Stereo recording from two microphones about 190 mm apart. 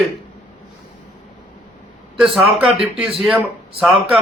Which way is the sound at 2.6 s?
5° right (ahead or behind).